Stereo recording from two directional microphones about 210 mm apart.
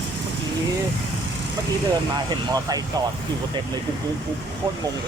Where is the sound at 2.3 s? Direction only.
20° right (ahead or behind).